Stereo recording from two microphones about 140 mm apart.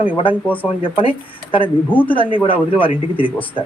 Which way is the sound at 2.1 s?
40° left (ahead or behind).